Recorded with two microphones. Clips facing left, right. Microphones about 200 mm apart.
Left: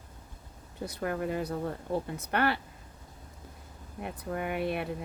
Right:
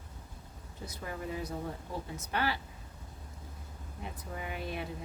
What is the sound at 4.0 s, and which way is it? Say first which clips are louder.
Speech: left 8 dB; 60° left (ahead or behind).